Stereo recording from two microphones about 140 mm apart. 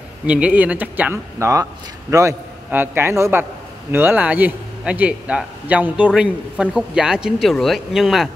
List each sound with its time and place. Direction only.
0.3 s a man's voice: 10° right (ahead or behind)